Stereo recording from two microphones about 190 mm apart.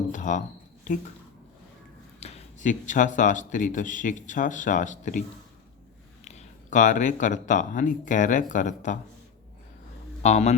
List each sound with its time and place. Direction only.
0.1 s a sound: 40° left (ahead or behind)
2.2 s speech: 35° left (ahead or behind)
6.2 s speech: 40° left (ahead or behind)
10.2 s speech: 35° left (ahead or behind)